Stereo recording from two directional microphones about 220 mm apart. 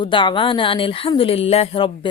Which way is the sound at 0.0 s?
20° left (ahead or behind).